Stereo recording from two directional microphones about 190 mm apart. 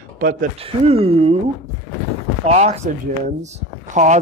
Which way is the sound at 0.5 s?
30° right (ahead or behind).